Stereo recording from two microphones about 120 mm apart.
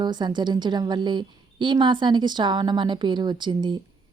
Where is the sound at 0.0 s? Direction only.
35° right (ahead or behind).